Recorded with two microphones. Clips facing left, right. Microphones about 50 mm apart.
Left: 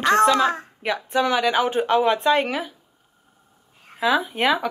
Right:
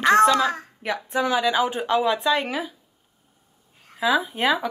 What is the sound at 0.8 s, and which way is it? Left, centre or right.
Speech, left.